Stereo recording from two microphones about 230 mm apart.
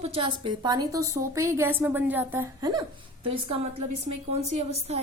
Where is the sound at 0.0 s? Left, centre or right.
Right.